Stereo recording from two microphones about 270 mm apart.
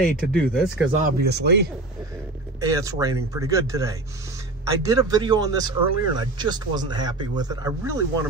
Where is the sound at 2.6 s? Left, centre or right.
Centre.